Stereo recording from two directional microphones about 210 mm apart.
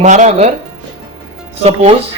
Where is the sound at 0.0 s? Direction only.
35° right (ahead or behind).